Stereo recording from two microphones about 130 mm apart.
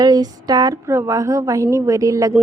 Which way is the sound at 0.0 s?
30° right (ahead or behind).